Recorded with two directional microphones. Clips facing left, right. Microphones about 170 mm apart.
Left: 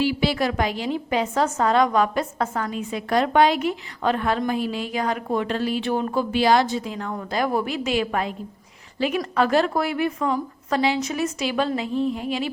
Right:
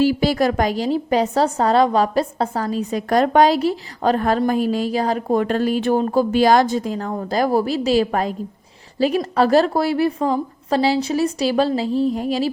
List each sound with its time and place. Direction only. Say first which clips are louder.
0.0 s a woman's voice: right 5 dB; 40° right (ahead or behind)